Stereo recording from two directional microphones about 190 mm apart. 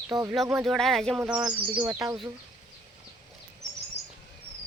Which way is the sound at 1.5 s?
25° right (ahead or behind).